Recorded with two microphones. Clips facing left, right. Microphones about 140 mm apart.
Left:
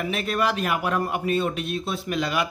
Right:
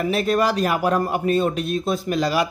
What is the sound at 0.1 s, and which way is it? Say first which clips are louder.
Speech: right 5 dB; 35° right (ahead or behind).